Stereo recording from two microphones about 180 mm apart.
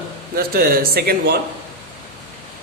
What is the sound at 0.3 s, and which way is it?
Speech, 55° right (ahead or behind).